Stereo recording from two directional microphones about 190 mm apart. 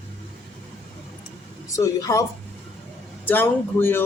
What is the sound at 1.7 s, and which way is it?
Speech, 15° left (ahead or behind).